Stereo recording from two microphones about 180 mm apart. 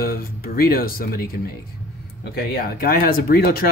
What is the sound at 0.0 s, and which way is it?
Speech, 55° left (ahead or behind).